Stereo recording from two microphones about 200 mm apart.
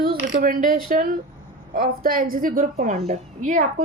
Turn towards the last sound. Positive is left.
turn(degrees=-35)  # may be behind; listen again after turning